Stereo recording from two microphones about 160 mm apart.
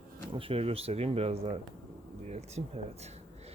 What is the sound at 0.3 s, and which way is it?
Speech, 35° right (ahead or behind).